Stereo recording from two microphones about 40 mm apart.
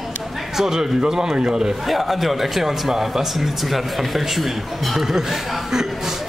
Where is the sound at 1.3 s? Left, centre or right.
Right.